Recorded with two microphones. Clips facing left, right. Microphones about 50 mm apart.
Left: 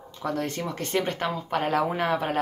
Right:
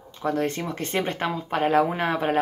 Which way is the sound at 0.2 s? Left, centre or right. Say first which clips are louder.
Right 3 dB; right.